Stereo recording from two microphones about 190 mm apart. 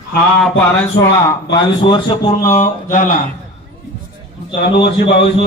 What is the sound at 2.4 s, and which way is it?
Speech, 35° left (ahead or behind).